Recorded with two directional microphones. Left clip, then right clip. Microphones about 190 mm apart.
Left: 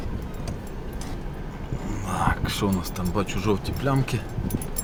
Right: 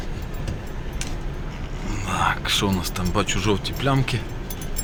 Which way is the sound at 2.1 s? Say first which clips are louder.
Right 5 dB; 10° left (ahead or behind).